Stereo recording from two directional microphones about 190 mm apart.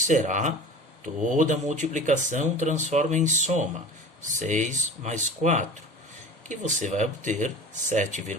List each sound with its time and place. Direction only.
0.1 s speech: 40° right (ahead or behind)